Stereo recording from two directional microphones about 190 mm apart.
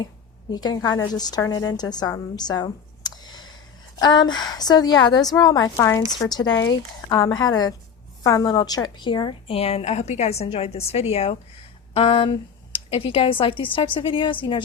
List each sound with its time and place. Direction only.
0.5 s a woman's voice: 20° left (ahead or behind)